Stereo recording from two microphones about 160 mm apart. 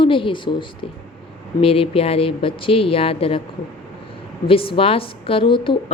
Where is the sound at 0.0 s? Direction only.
30° left (ahead or behind).